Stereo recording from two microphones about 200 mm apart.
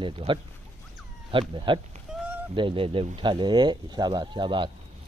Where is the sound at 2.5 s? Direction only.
25° right (ahead or behind).